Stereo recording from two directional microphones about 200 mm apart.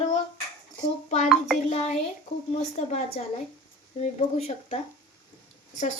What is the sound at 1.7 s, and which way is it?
A woman's voice, 35° left (ahead or behind).